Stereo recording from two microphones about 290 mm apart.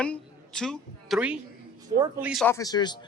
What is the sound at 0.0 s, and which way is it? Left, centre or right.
A woman's voice, centre.